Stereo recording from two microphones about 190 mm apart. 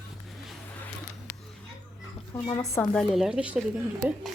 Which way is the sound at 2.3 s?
10° left (ahead or behind).